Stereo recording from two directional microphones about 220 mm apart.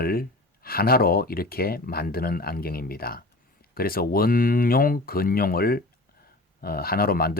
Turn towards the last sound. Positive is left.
turn(degrees=40)  # may be behind; listen again after turning